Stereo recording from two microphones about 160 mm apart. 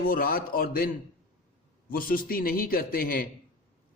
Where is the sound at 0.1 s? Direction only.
65° left (ahead or behind).